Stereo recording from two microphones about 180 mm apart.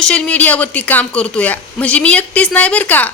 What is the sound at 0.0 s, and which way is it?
A woman's voice, 5° left (ahead or behind).